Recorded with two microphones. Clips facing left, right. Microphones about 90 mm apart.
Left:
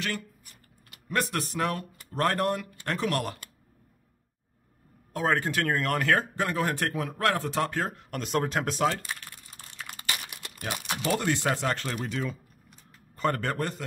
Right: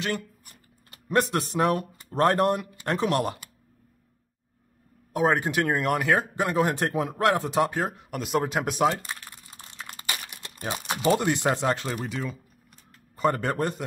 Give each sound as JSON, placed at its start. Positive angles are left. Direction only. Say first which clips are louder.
{"t": 1.0, "sound": "speech", "louder": "right 5 dB", "side_deg": -25}
{"t": 5.1, "sound": "speech", "louder": "right 4 dB", "side_deg": -15}
{"t": 9.1, "sound": "typing", "louder": "even", "side_deg": -20}
{"t": 10.3, "sound": "speech", "louder": "right 2 dB", "side_deg": -25}
{"t": 13.1, "sound": "speech", "louder": "right 3 dB", "side_deg": -15}